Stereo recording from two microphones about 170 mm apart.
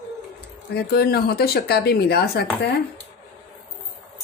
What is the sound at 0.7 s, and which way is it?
Speech, 65° left (ahead or behind).